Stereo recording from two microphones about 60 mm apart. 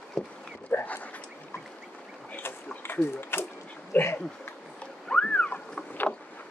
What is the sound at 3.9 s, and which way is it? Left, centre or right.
Speech, left.